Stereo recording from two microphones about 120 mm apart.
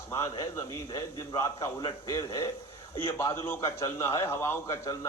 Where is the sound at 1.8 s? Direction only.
40° left (ahead or behind).